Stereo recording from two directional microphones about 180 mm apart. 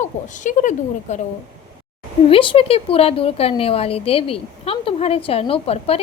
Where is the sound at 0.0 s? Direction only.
45° left (ahead or behind).